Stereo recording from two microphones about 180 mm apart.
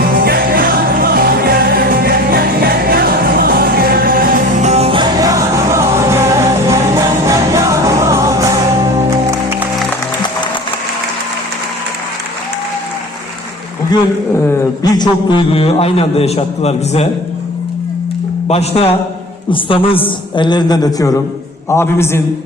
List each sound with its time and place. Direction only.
0.2 s music: 55° right (ahead or behind)
4.7 s music: 30° right (ahead or behind); by 9.6 s 15° right (ahead or behind)
14.9 s a man's voice: 25° left (ahead or behind)
18.4 s a man's voice: 35° left (ahead or behind); by 22.2 s 15° left (ahead or behind)